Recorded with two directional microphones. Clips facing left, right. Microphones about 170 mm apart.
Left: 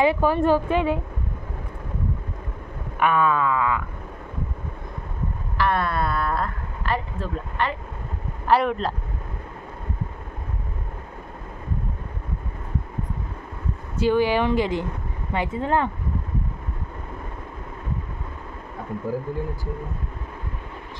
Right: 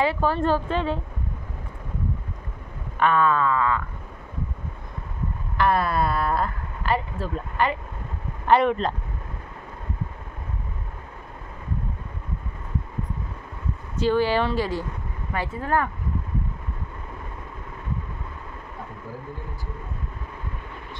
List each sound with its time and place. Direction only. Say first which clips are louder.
0.0 s speech: left 3 dB; 15° left (ahead or behind)
3.0 s speech: even; 10° left (ahead or behind)
5.6 s speech: right 1 dB; centre (ahead or behind)
13.9 s speech: left 1 dB; 15° left (ahead or behind)